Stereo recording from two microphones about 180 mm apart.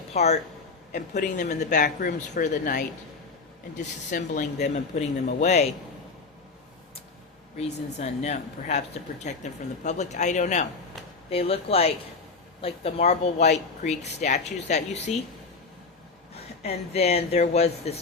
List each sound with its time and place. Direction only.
0.1 s a man's voice: 40° left (ahead or behind)
7.9 s speech: 40° left (ahead or behind)
16.9 s speech: 35° left (ahead or behind)